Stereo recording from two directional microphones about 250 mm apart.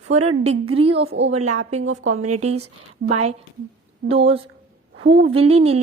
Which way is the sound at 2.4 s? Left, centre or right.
Right.